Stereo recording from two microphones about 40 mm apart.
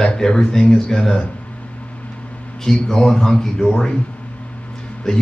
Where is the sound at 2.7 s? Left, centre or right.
Centre.